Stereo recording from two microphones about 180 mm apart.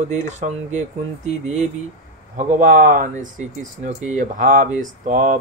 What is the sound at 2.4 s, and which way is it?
Speech, 45° right (ahead or behind).